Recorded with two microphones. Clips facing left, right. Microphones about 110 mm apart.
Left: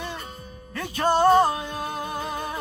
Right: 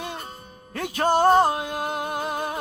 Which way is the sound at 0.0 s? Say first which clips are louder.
Even; 45° right (ahead or behind).